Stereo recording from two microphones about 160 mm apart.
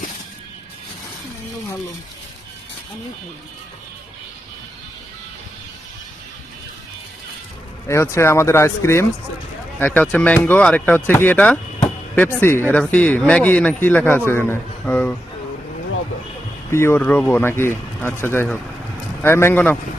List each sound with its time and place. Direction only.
7.9 s speech: 15° left (ahead or behind)
16.7 s speech: 15° left (ahead or behind)